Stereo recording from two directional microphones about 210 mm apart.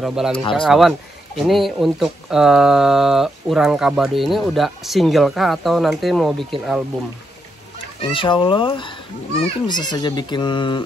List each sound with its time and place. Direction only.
0.0 s speech: centre (ahead or behind)
0.3 s speech: 25° left (ahead or behind)
0.6 s speech: centre (ahead or behind)
8.0 s speech: 25° left (ahead or behind)